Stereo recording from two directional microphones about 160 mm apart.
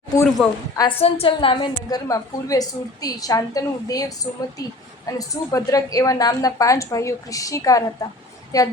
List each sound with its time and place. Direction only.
0.4 s a woman's voice: centre (ahead or behind)
0.8 s a woman's voice: 35° left (ahead or behind)